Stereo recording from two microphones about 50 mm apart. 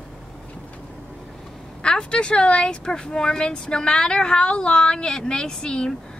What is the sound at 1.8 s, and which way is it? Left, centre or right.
Speech, centre.